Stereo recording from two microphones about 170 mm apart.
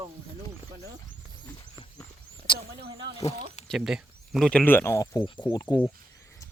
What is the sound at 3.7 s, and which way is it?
Speech, 5° right (ahead or behind).